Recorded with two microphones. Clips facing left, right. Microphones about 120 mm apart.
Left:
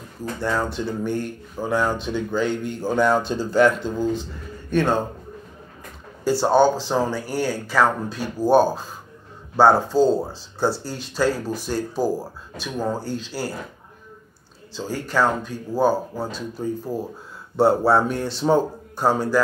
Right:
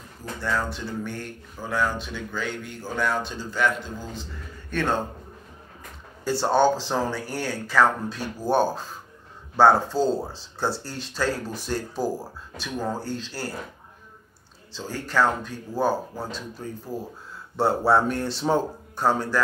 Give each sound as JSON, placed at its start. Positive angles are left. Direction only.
{"t": 0.4, "sound": "speech", "side_deg": 20}
{"t": 4.1, "sound": "speech", "side_deg": 15}
{"t": 6.2, "sound": "speech", "side_deg": 5}
{"t": 14.7, "sound": "speech", "side_deg": 5}